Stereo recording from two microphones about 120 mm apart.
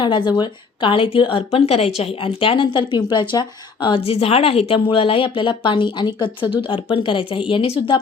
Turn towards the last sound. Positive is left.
turn(degrees=50)  # may be behind; listen again after turning